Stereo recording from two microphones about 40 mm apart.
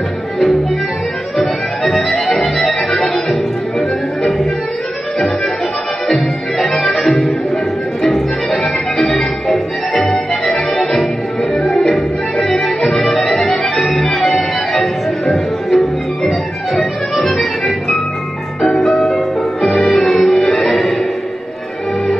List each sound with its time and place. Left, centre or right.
1.3 s music: centre
2.0 s accordion: centre
2.6 s music: centre
6.9 s music: centre
11.7 s music: centre
17.2 s music: centre
20.4 s music: left